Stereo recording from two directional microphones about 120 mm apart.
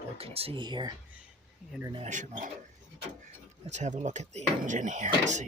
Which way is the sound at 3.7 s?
80° right.